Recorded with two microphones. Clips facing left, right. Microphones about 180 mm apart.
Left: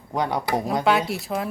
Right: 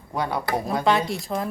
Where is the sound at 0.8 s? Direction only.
5° left (ahead or behind).